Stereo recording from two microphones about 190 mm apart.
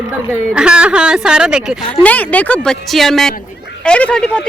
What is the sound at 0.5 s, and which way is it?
A woman's voice, 5° right (ahead or behind).